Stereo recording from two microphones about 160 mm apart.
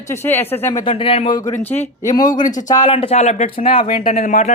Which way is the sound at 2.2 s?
55° left (ahead or behind).